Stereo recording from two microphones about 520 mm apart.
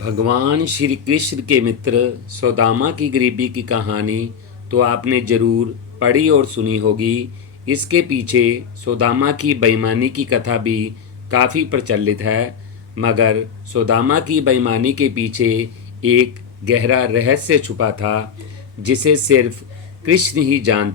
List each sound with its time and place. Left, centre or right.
0.0 s a man's voice: right